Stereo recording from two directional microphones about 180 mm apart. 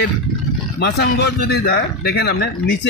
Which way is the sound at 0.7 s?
65° left (ahead or behind).